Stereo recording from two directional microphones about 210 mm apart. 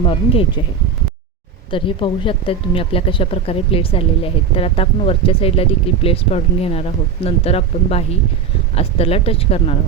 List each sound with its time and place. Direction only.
0.0 s speech: 25° left (ahead or behind)
1.7 s speech: 25° left (ahead or behind)